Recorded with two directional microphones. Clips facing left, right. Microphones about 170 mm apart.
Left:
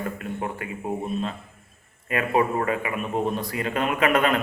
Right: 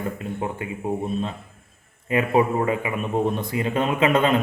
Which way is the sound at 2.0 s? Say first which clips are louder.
Right 3 dB; 20° right (ahead or behind).